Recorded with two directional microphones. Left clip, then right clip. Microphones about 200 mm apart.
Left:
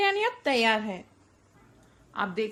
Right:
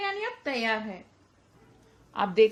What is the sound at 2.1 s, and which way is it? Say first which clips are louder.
Speech: right 7 dB; 15° right (ahead or behind).